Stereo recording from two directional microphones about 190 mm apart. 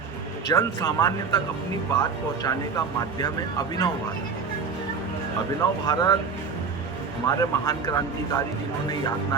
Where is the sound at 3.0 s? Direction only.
20° left (ahead or behind).